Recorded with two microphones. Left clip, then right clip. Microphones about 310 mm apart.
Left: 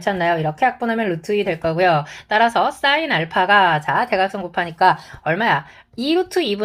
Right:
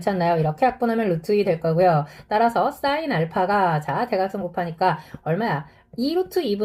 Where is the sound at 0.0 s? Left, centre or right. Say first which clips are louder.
Left 2 dB; centre.